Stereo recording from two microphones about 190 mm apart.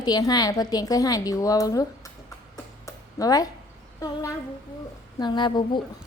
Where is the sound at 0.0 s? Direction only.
20° left (ahead or behind).